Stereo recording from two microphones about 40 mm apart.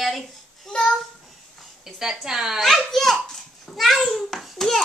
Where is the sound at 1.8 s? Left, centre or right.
Centre.